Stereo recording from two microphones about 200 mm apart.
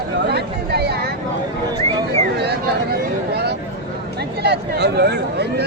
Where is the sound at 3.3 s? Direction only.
55° right (ahead or behind).